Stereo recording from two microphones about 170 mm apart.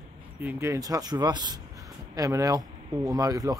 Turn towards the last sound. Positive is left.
turn(degrees=-20)  # may be behind; listen again after turning